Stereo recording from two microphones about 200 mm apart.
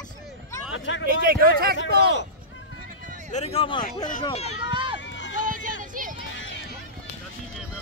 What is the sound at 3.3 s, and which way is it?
Speech, 30° left (ahead or behind).